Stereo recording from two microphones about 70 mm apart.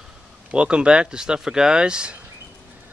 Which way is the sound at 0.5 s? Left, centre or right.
Centre.